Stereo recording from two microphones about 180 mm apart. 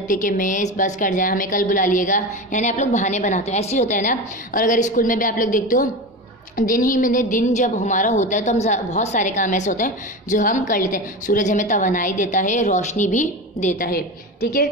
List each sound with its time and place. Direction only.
0.1 s a woman's voice: 45° left (ahead or behind)